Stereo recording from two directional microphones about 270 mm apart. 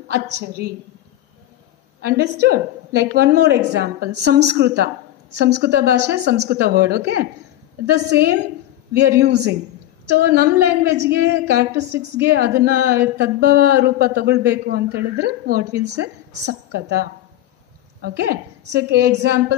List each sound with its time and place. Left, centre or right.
0.1 s a woman's voice: right
2.0 s a sound: right
2.4 s a woman's voice: right